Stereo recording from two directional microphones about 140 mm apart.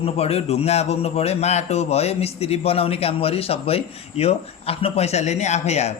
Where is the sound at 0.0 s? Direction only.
45° left (ahead or behind).